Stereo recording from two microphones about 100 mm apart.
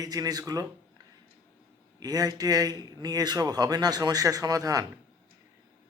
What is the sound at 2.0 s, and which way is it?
A man's voice, 40° right (ahead or behind).